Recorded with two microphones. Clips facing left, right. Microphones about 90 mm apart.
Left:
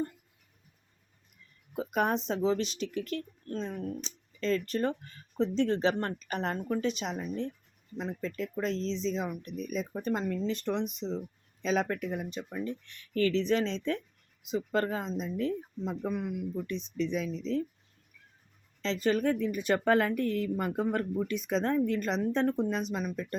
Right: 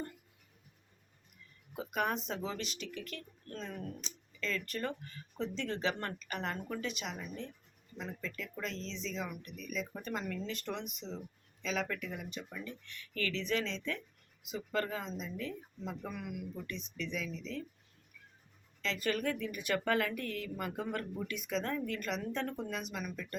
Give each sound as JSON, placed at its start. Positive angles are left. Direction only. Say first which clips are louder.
{"t": 1.7, "sound": "speech", "louder": "left 6 dB", "side_deg": 40}
{"t": 18.8, "sound": "speech", "louder": "left 7 dB", "side_deg": 30}